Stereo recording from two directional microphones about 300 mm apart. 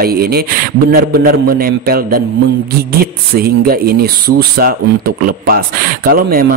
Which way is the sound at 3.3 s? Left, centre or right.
Right.